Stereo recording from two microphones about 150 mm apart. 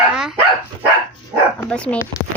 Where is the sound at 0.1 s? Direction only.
5° right (ahead or behind).